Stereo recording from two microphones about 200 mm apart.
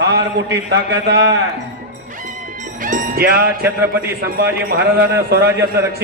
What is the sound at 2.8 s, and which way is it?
A man's voice, 40° right (ahead or behind).